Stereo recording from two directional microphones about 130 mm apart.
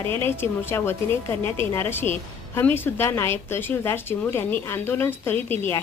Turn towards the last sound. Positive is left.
turn(degrees=15)  # may be behind; listen again after turning